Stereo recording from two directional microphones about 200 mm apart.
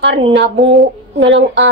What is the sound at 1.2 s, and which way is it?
Speech, 65° right (ahead or behind).